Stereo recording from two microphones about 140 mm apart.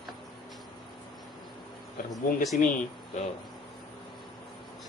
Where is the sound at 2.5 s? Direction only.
65° left (ahead or behind).